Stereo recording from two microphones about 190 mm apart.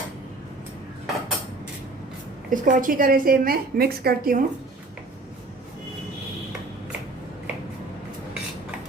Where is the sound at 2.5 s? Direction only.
45° right (ahead or behind).